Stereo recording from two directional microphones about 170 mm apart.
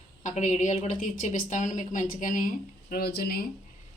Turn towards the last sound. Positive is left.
turn(degrees=65)  # may be behind; listen again after turning